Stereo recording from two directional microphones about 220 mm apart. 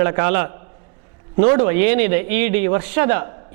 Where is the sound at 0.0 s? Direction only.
15° right (ahead or behind).